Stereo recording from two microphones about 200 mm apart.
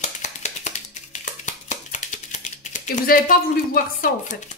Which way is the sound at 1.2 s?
40° left (ahead or behind).